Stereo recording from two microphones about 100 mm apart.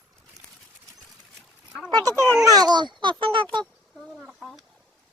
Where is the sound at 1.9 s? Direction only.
35° right (ahead or behind); by 3.4 s 55° right (ahead or behind).